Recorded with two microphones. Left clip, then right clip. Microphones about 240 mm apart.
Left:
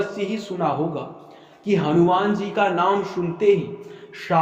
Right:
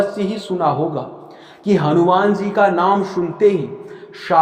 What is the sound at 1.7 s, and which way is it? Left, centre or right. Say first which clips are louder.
Speech: right 4 dB; right.